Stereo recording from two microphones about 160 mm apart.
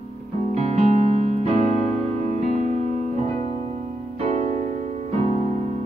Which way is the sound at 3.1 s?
45° right (ahead or behind).